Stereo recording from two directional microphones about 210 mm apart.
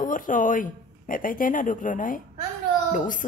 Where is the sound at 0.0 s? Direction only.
40° left (ahead or behind).